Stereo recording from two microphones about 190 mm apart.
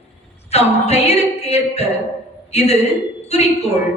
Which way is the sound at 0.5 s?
35° left (ahead or behind).